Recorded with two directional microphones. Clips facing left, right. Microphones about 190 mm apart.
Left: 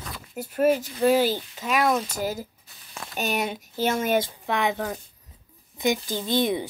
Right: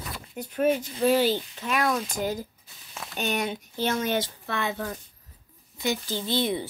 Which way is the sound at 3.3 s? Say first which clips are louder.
Left 1 dB; 10° left (ahead or behind).